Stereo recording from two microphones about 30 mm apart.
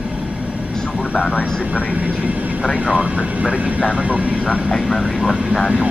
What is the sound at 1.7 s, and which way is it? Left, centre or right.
Speech, right.